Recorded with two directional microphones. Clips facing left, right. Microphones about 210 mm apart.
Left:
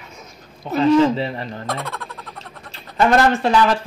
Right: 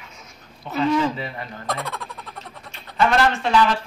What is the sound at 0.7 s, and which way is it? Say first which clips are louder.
Speech: left 6 dB; 30° left (ahead or behind).